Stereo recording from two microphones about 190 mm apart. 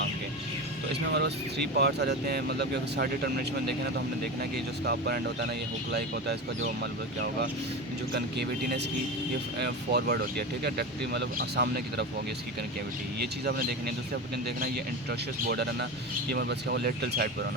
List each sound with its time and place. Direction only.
1.1 s speech: 60° right (ahead or behind)
4.9 s speech: 55° right (ahead or behind)
8.1 s speech: 60° right (ahead or behind)
13.4 s speech: 55° right (ahead or behind)
15.4 s speech: 60° right (ahead or behind)